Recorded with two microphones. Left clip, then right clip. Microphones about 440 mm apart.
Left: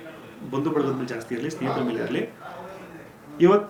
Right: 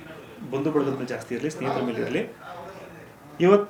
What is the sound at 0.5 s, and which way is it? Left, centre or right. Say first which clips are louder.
Speech: even; centre.